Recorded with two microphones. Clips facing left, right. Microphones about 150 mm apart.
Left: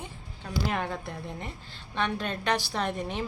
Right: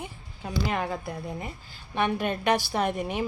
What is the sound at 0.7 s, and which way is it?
A woman's voice, centre (ahead or behind).